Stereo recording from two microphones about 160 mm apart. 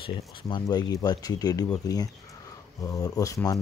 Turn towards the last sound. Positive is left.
turn(degrees=20)  # may be behind; listen again after turning